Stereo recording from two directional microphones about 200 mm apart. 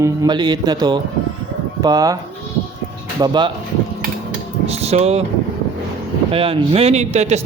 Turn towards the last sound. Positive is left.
turn(degrees=-35)  # may be behind; listen again after turning